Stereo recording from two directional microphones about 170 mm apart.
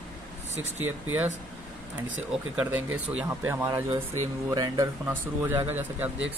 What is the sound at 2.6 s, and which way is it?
Speech, 10° right (ahead or behind).